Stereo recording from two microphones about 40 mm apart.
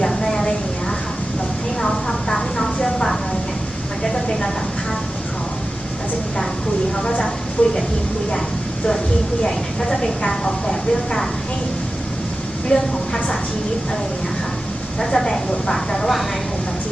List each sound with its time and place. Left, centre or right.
0.0 s a sound: centre
1.8 s vehicle: centre
6.9 s a sound: centre
7.6 s speech: left
9.4 s a woman's voice: centre
12.7 s a woman's voice: left
15.1 s a woman's voice: centre